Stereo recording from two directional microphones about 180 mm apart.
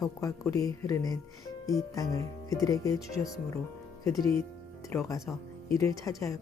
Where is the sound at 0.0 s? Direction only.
20° left (ahead or behind).